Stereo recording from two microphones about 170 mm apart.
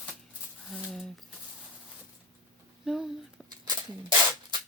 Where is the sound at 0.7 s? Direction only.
Centre (ahead or behind).